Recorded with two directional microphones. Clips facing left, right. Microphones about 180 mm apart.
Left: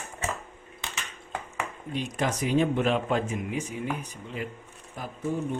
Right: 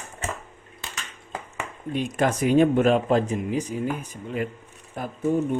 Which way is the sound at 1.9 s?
55° right (ahead or behind).